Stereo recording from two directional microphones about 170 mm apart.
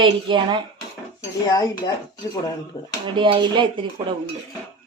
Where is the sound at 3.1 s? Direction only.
30° right (ahead or behind).